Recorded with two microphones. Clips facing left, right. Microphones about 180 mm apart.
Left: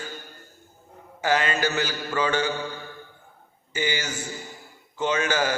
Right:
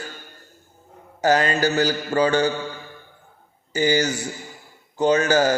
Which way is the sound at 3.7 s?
40° right (ahead or behind).